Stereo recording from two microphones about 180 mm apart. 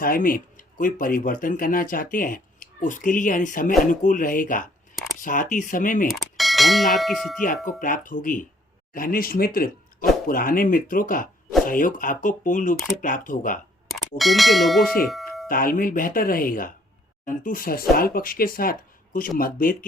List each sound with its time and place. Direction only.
0.0 s speech: 50° left (ahead or behind)
6.1 s clang: centre (ahead or behind)
7.4 s speech: 50° left (ahead or behind)
14.2 s bell: centre (ahead or behind)
15.0 s doorbell: centre (ahead or behind)
15.4 s speech: 50° left (ahead or behind)